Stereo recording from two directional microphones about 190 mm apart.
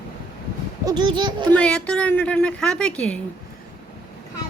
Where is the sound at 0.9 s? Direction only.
25° right (ahead or behind).